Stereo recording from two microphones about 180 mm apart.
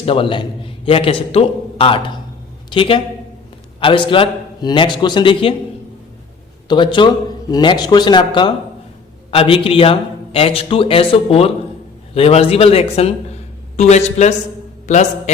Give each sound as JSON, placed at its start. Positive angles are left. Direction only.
{"t": 0.0, "sound": "a man's voice", "side_deg": 30}
{"t": 6.7, "sound": "a man's voice", "side_deg": 25}